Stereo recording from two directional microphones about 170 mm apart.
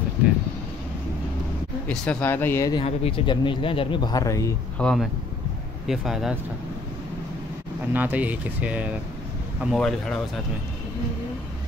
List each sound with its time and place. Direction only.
1.9 s speech: 5° left (ahead or behind)
2.7 s speech: 35° left (ahead or behind); by 4.6 s 20° left (ahead or behind)
4.7 s speech: 5° left (ahead or behind)
7.9 s speech: 10° right (ahead or behind)